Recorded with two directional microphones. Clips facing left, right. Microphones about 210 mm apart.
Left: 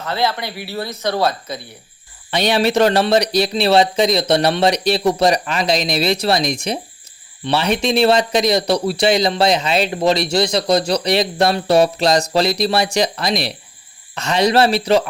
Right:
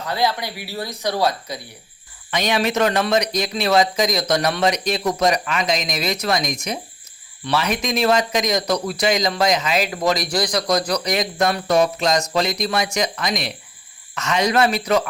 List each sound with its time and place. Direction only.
0.0 s speech: 15° right (ahead or behind)
2.3 s speech: 30° left (ahead or behind)